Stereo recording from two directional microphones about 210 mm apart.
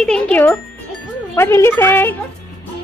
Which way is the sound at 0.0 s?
5° left (ahead or behind).